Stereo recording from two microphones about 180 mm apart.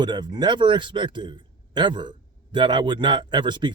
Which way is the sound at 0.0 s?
25° right (ahead or behind).